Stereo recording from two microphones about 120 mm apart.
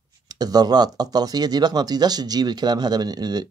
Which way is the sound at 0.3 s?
35° right (ahead or behind).